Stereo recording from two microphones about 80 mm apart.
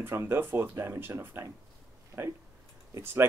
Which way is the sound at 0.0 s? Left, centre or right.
Right.